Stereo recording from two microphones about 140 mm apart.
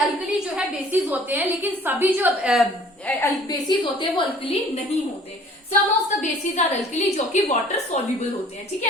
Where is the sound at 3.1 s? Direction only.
10° left (ahead or behind).